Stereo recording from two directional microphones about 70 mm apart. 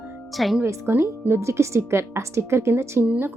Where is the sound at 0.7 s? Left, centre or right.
Right.